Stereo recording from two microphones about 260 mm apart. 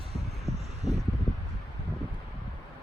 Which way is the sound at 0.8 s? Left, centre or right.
Right.